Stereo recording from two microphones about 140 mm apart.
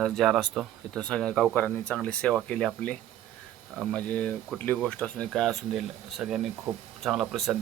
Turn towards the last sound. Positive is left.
turn(degrees=0)  # may be behind; listen again after turning